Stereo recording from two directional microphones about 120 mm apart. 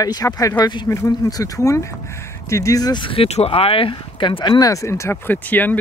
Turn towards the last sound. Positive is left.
turn(degrees=15)  # may be behind; listen again after turning